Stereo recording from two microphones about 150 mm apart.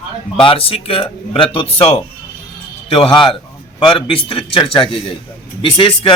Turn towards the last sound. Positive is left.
turn(degrees=35)  # may be behind; listen again after turning